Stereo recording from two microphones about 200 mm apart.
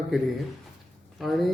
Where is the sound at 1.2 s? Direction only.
Centre (ahead or behind).